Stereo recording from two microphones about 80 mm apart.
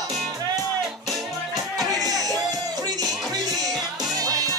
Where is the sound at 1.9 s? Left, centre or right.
Right.